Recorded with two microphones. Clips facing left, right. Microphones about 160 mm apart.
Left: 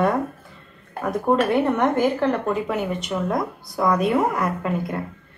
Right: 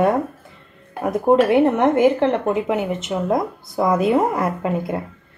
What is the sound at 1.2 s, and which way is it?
A woman's voice, 25° right (ahead or behind).